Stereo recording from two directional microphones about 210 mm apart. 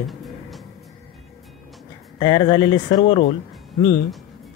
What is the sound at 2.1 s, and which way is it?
Speech, 20° left (ahead or behind).